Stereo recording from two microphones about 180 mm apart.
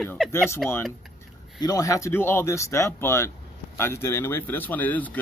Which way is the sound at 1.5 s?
20° left (ahead or behind).